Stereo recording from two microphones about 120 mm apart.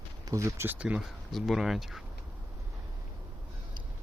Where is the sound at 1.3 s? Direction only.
Centre (ahead or behind).